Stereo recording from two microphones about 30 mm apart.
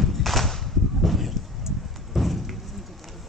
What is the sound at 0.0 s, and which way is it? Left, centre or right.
Whip, centre.